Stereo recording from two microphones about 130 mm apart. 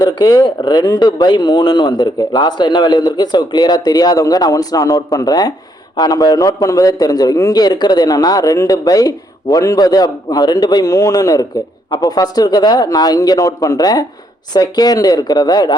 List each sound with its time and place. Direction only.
0.0 s a man's voice: 30° left (ahead or behind)